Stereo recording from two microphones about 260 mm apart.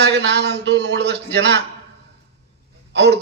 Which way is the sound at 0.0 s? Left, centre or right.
Right.